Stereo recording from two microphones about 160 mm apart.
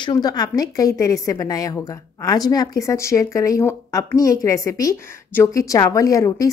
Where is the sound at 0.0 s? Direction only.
25° left (ahead or behind).